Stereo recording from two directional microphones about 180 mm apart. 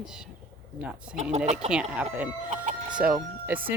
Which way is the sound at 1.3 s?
40° right (ahead or behind).